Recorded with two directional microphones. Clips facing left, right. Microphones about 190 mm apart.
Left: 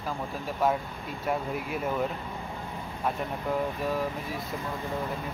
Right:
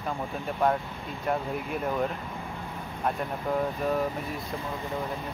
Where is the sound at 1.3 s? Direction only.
5° left (ahead or behind).